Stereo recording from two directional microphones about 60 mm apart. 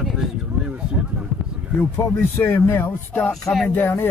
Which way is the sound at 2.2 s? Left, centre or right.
Left.